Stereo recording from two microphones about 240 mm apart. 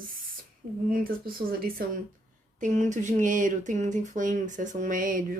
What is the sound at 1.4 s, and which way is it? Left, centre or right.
Speech, right.